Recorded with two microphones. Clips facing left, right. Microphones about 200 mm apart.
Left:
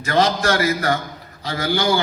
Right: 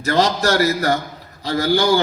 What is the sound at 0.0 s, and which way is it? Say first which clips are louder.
A man's voice: right 1 dB; 40° right (ahead or behind).